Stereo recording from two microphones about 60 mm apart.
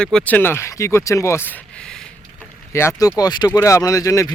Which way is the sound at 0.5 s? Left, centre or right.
Left.